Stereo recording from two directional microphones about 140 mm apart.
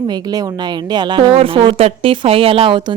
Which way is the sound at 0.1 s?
30° right (ahead or behind).